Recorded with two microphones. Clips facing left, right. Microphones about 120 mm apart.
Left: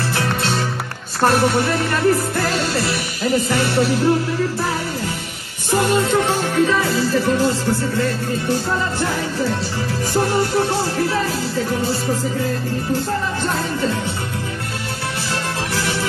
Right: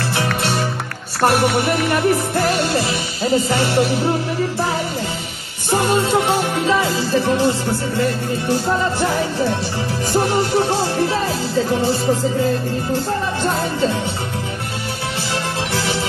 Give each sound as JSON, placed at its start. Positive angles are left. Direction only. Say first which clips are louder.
{"t": 0.1, "sound": "music", "louder": "right 2 dB", "side_deg": -15}
{"t": 5.7, "sound": "music", "louder": "even", "side_deg": -25}
{"t": 10.1, "sound": "music", "louder": "right 1 dB", "side_deg": -20}
{"t": 15.7, "sound": "music", "louder": "right 1 dB", "side_deg": -20}